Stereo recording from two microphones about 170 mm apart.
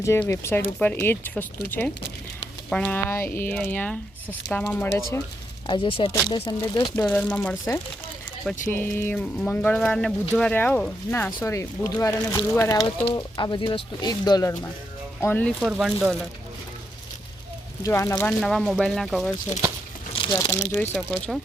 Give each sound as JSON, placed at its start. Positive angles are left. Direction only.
{"t": 0.0, "sound": "speech", "side_deg": 15}
{"t": 2.6, "sound": "speech", "side_deg": 5}
{"t": 5.6, "sound": "speech", "side_deg": 30}
{"t": 7.0, "sound": "speech", "side_deg": 10}
{"t": 11.3, "sound": "speech", "side_deg": 20}
{"t": 15.2, "sound": "speech", "side_deg": 10}
{"t": 15.6, "sound": "speech", "side_deg": 0}
{"t": 17.8, "sound": "speech", "side_deg": 20}
{"t": 18.3, "sound": "speech", "side_deg": 0}
{"t": 20.1, "sound": "a sound", "side_deg": 30}
{"t": 20.5, "sound": "speech", "side_deg": 10}